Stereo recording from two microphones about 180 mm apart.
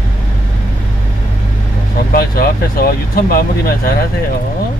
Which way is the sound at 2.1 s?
55° left (ahead or behind).